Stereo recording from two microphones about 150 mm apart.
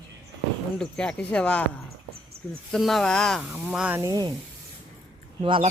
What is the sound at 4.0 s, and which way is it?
Speech, 25° right (ahead or behind).